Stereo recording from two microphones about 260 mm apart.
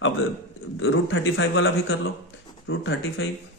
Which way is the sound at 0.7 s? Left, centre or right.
Left.